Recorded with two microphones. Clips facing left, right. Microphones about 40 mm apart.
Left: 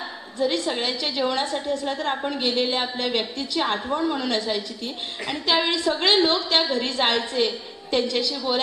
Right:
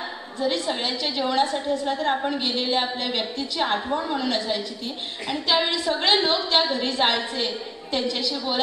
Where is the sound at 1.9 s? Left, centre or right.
Centre.